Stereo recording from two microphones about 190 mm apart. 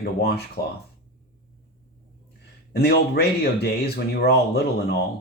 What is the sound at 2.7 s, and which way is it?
Speech, 55° left (ahead or behind).